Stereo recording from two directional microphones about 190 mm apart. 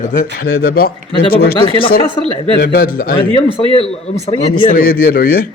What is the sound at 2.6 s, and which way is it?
Speech, 50° left (ahead or behind).